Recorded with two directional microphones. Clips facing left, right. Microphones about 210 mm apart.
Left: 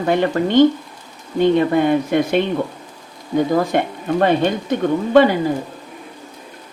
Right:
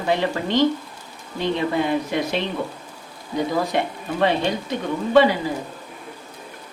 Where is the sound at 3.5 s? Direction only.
50° left (ahead or behind).